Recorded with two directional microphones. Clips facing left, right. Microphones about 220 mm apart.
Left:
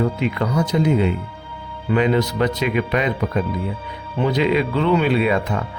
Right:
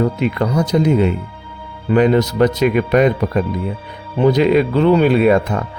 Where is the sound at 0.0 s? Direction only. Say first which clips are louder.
Right 4 dB; 40° right (ahead or behind).